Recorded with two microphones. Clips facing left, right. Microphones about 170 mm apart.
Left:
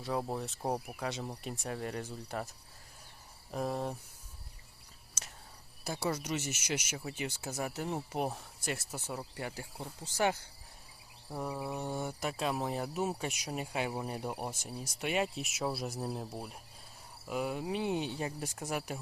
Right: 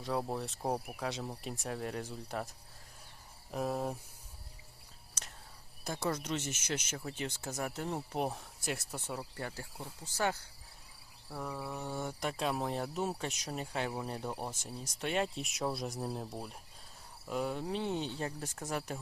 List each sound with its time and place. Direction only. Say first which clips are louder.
0.0 s speech: even; centre (ahead or behind)
3.5 s speech: even; 5° right (ahead or behind)
5.2 s whispering: even; 5° left (ahead or behind)
5.8 s speech: left 1 dB; 5° left (ahead or behind)
10.2 s speech: left 3 dB; 20° left (ahead or behind)